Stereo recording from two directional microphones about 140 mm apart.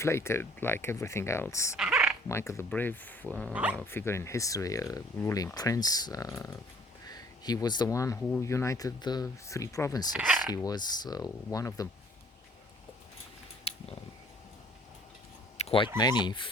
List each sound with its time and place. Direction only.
0.0 s speech: 20° left (ahead or behind)
1.7 s a sound: 5° right (ahead or behind)
2.3 s speech: 20° left (ahead or behind)
3.5 s speech: 10° right (ahead or behind)
3.8 s speech: 15° left (ahead or behind)
10.2 s speech: centre (ahead or behind)
10.5 s speech: 25° left (ahead or behind)
13.7 s a sound: 45° left (ahead or behind)
15.5 s a sound: 45° left (ahead or behind)
16.0 s speech: 30° left (ahead or behind)